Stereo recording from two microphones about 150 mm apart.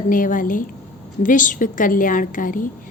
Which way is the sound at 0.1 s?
65° left (ahead or behind).